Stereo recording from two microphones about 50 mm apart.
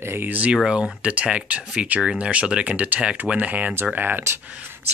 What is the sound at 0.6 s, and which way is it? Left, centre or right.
Speech, right.